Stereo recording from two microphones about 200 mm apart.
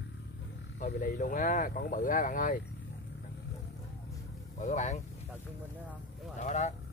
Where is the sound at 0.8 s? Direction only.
40° left (ahead or behind).